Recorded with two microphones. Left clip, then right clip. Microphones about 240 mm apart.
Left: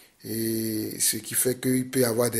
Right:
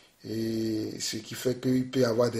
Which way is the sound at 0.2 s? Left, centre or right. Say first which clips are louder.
Left 2 dB; left.